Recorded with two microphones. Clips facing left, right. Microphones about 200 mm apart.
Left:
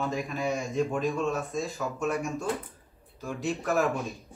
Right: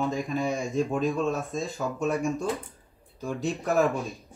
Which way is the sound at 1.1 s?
30° right (ahead or behind).